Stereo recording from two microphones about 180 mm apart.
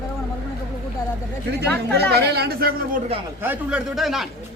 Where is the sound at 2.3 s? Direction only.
60° right (ahead or behind).